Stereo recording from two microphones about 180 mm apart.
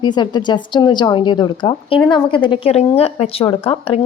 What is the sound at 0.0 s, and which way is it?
A woman's voice, 25° left (ahead or behind).